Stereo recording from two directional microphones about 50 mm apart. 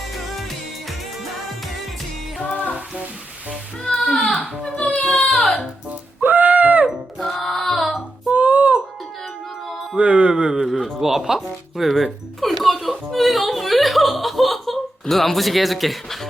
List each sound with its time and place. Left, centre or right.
3.8 s music: centre
4.6 s baby cry: centre
4.9 s a sound: centre
5.3 s music: centre
6.2 s a sound: right
7.2 s music: centre
8.3 s music: right
10.0 s music: right
10.5 s a sound: centre
11.0 s music: centre